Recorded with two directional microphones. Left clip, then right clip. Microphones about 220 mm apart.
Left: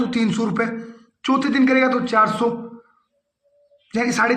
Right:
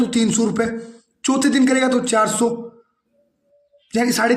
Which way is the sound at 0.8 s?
50° right (ahead or behind).